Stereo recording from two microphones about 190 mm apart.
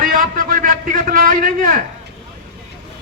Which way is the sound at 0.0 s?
45° right (ahead or behind).